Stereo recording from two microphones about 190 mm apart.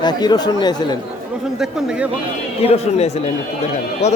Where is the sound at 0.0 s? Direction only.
20° left (ahead or behind).